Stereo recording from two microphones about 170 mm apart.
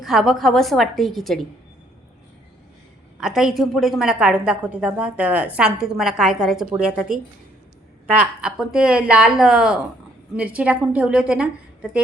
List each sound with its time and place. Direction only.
0.0 s a woman's voice: centre (ahead or behind)
3.2 s a woman's voice: 5° right (ahead or behind)